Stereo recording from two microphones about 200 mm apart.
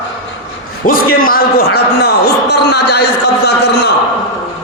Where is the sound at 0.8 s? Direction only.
45° left (ahead or behind).